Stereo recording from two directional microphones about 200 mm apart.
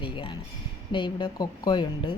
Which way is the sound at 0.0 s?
25° left (ahead or behind).